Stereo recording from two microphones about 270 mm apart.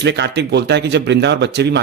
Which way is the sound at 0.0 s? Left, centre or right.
Right.